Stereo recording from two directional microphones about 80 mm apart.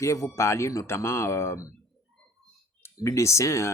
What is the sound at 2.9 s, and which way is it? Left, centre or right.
Speech, left.